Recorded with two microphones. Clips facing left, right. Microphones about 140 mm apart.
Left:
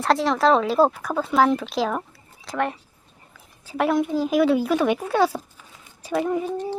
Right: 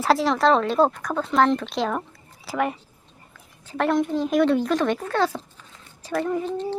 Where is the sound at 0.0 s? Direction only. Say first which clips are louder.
Even; centre (ahead or behind).